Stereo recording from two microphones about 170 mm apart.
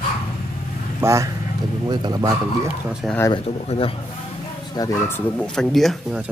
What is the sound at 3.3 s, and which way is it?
Speech, 35° left (ahead or behind).